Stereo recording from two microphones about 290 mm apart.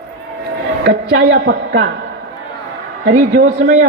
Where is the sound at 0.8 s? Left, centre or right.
Right.